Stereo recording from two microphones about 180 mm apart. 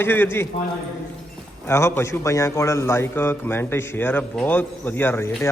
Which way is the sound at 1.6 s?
15° left (ahead or behind).